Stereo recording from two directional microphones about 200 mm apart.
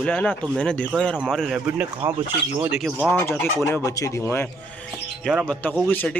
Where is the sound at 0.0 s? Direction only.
5° left (ahead or behind).